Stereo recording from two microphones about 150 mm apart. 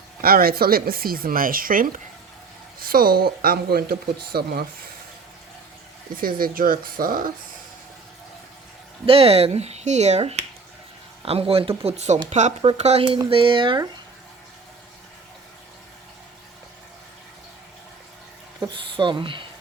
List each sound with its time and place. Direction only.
0.2 s speech: 80° right
6.1 s speech: 75° right (ahead or behind)
9.0 s speech: 40° right (ahead or behind)
18.6 s speech: 35° right (ahead or behind)